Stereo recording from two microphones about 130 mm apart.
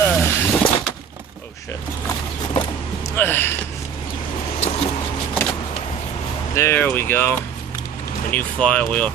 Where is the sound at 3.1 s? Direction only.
15° left (ahead or behind).